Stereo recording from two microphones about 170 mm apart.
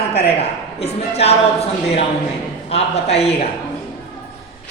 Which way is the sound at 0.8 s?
40° left (ahead or behind).